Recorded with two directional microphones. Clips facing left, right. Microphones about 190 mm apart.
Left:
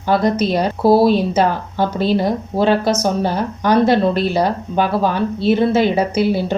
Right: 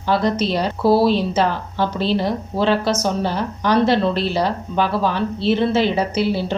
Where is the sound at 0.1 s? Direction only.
45° left (ahead or behind).